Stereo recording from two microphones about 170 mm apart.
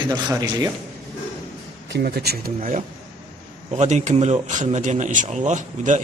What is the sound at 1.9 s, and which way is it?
Speech, 70° right (ahead or behind).